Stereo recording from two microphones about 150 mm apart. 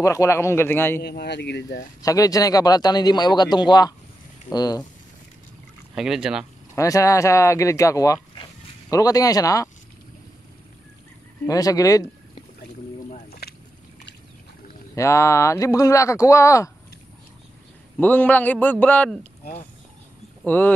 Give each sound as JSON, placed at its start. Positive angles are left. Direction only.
{"t": 0.0, "sound": "a man's voice", "side_deg": 20}
{"t": 1.0, "sound": "speech", "side_deg": 90}
{"t": 2.0, "sound": "a man's voice", "side_deg": 25}
{"t": 5.9, "sound": "speech", "side_deg": -5}
{"t": 6.7, "sound": "a man's voice", "side_deg": 20}
{"t": 11.4, "sound": "speech", "side_deg": 25}
{"t": 13.3, "sound": "a sound", "side_deg": 90}
{"t": 15.0, "sound": "a man's voice", "side_deg": 20}
{"t": 17.9, "sound": "a man's voice", "side_deg": 10}
{"t": 20.4, "sound": "a man's voice", "side_deg": 10}